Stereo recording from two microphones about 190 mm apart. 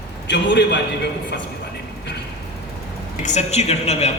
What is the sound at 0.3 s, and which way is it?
Speech, 65° left (ahead or behind).